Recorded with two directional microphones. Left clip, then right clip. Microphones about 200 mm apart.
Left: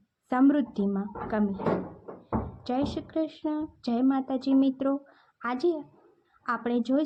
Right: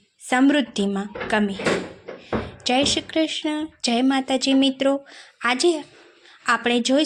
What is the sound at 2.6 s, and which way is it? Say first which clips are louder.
A woman's voice: right 13 dB; 15° right (ahead or behind).